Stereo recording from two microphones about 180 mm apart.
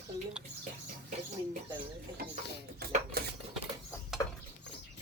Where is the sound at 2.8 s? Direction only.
60° right (ahead or behind).